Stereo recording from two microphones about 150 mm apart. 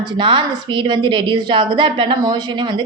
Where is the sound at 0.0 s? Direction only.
30° right (ahead or behind).